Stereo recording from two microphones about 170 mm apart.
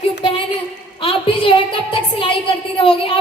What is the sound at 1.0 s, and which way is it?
Speech, 30° left (ahead or behind).